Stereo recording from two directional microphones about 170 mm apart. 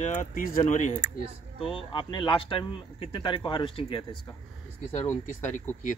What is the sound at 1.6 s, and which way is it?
Speech, 30° left (ahead or behind).